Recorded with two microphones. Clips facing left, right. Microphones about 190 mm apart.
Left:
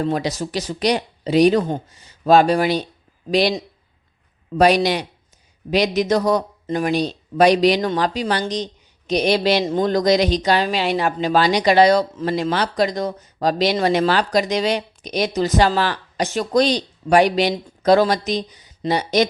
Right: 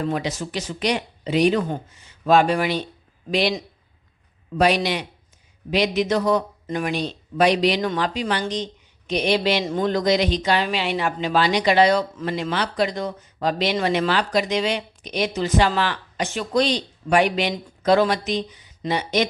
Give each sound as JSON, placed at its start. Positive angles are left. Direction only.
{"t": 0.0, "sound": "a man's voice", "side_deg": 35}